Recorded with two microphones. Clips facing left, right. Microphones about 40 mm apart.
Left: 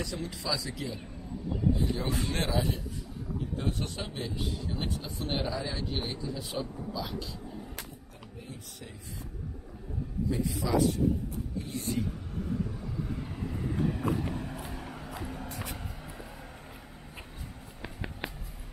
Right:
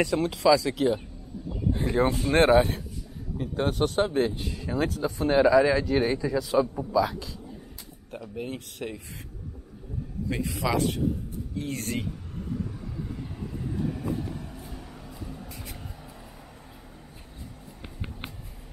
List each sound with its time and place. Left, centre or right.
0.0 s speech: right
1.7 s speech: right
3.3 s a man's voice: right
8.1 s speech: right
10.3 s speech: right
13.1 s vehicle: centre
15.4 s music: left